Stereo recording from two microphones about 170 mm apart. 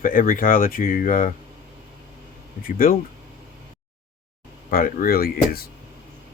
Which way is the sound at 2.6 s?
55° left (ahead or behind).